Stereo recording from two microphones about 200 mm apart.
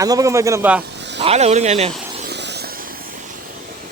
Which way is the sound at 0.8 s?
60° right (ahead or behind).